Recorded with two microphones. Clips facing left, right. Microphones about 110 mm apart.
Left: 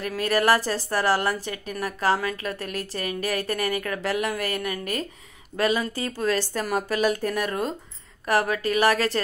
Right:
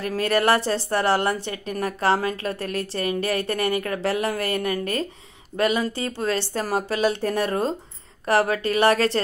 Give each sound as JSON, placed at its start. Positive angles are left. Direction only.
{"t": 0.0, "sound": "a woman's voice", "side_deg": -35}